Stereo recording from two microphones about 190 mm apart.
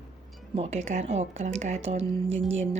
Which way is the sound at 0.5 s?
35° right (ahead or behind).